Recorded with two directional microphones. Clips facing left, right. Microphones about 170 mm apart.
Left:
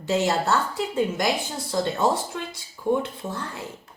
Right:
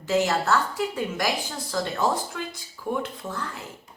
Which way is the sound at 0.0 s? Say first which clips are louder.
Left 1 dB; 25° left (ahead or behind).